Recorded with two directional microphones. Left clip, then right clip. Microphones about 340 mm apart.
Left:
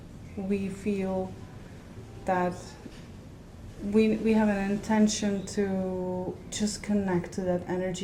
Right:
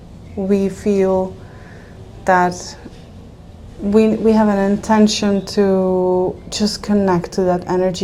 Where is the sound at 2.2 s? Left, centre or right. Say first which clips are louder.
Right 14 dB; centre.